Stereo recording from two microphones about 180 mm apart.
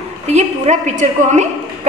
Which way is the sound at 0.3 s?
40° right (ahead or behind).